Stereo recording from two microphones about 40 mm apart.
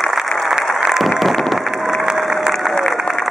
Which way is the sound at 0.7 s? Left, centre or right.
Centre.